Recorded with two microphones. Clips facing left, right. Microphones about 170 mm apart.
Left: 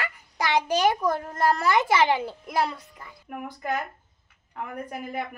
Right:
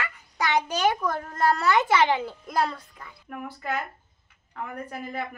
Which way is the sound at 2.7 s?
15° left (ahead or behind).